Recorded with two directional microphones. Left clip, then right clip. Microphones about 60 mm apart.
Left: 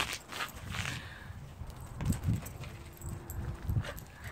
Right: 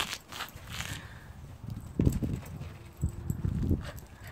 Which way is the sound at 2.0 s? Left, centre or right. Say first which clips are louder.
Right 9 dB; left.